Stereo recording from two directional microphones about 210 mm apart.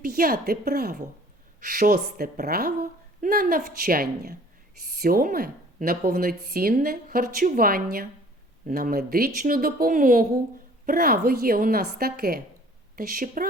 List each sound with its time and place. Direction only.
0.0 s a woman's voice: 45° right (ahead or behind)